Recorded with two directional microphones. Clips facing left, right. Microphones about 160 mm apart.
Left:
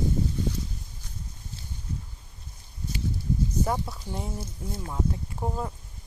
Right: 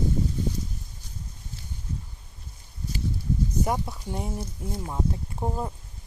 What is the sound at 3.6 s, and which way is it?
Speech, 15° right (ahead or behind).